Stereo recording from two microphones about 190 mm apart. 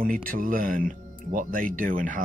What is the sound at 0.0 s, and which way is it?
Speech, 50° right (ahead or behind).